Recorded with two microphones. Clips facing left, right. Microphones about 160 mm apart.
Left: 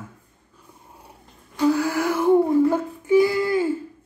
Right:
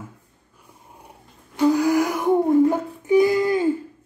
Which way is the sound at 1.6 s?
15° right (ahead or behind).